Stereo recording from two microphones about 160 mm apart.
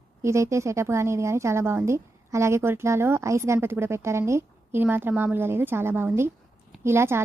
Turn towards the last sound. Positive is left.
turn(degrees=-15)  # may be behind; listen again after turning